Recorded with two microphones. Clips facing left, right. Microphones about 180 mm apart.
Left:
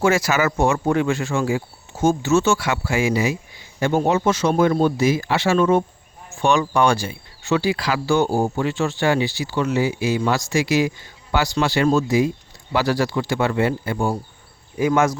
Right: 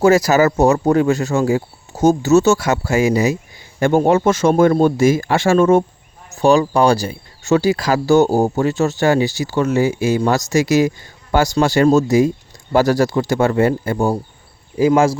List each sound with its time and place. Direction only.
0.0 s speech: 40° right (ahead or behind)
3.8 s speech: 50° right (ahead or behind)
6.3 s speech: 35° right (ahead or behind)
14.8 s speech: 30° right (ahead or behind)